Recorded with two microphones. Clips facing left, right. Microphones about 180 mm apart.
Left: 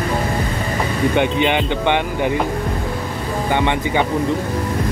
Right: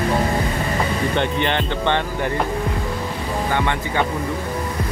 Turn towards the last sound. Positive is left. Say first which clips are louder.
# left 4 dB
turn(degrees=20)  # may be behind; listen again after turning